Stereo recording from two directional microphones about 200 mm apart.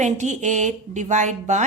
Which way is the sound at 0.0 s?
35° right (ahead or behind).